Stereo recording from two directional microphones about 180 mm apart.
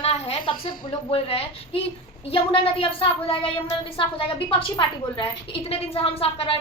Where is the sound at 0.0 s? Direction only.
30° left (ahead or behind).